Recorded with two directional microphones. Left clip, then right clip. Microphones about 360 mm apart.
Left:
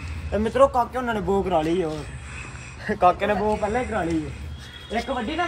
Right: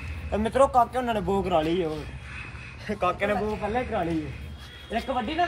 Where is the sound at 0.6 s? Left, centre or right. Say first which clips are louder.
Left 1 dB; centre.